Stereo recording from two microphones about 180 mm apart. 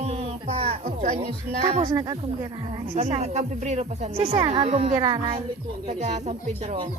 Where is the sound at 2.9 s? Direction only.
35° right (ahead or behind).